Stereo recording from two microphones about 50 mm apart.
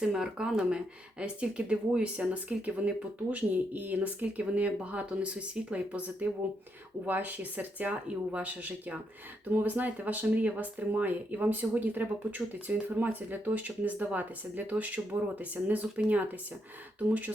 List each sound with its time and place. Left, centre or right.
0.0 s speech: centre
1.2 s speech: right
9.5 s speech: right